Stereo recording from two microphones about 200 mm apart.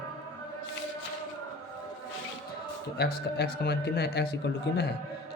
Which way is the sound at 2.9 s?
55° left (ahead or behind).